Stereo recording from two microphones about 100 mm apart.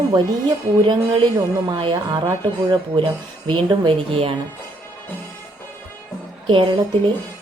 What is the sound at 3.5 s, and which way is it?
Speech, 60° right (ahead or behind).